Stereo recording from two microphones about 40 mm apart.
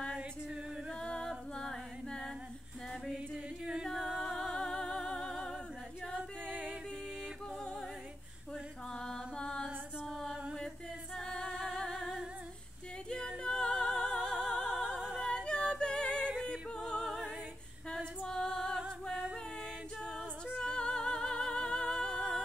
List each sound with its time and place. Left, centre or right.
1.0 s a capella: centre
1.5 s singing: centre
4.2 s music: centre
8.9 s music: centre
10.0 s music: centre
11.1 s music: centre
13.4 s music: left
14.0 s music: centre
14.9 s a capella: right
15.1 s singing: centre
16.3 s music: centre
18.2 s music: centre
20.1 s female singing: centre
20.6 s music: left